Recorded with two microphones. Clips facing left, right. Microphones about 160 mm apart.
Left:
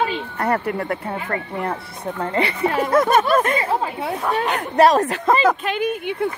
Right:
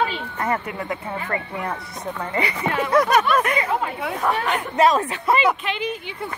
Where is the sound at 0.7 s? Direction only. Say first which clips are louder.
Left 5 dB; 55° left (ahead or behind).